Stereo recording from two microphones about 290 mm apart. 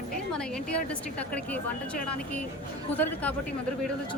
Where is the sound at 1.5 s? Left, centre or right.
Centre.